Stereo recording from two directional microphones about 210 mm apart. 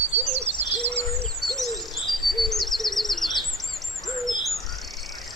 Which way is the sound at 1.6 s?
Centre (ahead or behind).